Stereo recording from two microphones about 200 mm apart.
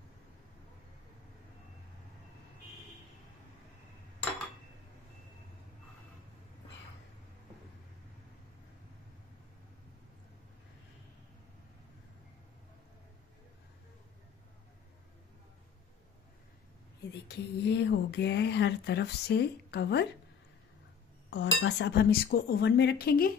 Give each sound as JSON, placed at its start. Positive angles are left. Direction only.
{"t": 17.3, "sound": "speech", "side_deg": 60}
{"t": 21.3, "sound": "cutlery", "side_deg": 65}
{"t": 21.6, "sound": "speech", "side_deg": 60}